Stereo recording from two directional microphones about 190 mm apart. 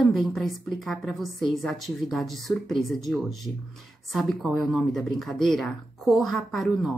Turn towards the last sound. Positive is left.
turn(degrees=0)  # may be behind; listen again after turning